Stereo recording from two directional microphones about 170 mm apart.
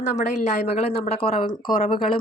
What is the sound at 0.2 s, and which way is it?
Speech, 45° left (ahead or behind).